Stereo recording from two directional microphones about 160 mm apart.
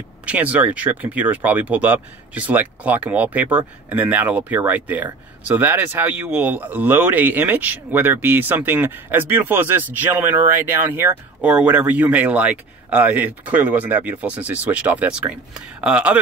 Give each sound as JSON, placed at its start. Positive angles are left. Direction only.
{"t": 0.2, "sound": "speech", "side_deg": -10}